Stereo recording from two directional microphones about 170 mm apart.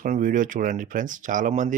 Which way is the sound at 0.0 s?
50° right (ahead or behind).